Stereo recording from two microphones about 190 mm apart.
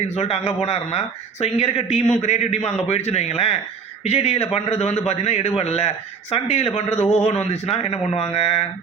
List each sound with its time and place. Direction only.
0.1 s a man's voice: 35° left (ahead or behind)